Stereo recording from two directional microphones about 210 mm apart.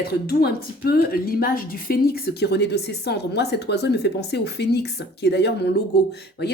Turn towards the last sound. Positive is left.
turn(degrees=50)  # may be behind; listen again after turning